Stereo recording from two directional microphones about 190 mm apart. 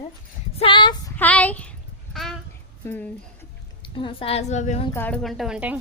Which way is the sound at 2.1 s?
Centre (ahead or behind).